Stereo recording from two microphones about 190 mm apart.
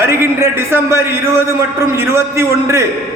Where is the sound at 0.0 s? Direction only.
10° right (ahead or behind).